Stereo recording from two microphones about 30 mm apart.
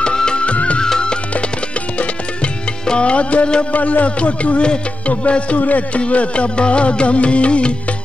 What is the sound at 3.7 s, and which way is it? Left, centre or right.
Music, left.